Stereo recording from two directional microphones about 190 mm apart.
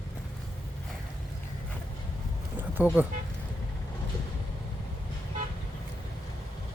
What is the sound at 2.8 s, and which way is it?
Speech, 10° right (ahead or behind).